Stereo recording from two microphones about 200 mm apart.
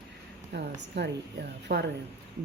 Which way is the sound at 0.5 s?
60° right (ahead or behind).